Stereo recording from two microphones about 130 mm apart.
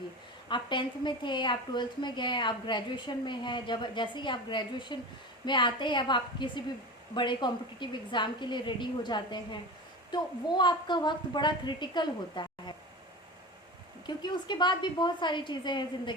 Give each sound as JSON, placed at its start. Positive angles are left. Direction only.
{"t": 0.4, "sound": "a woman's voice", "side_deg": 40}
{"t": 14.1, "sound": "a woman's voice", "side_deg": 35}